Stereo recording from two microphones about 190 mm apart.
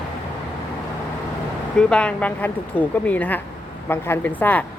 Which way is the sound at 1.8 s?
5° left (ahead or behind).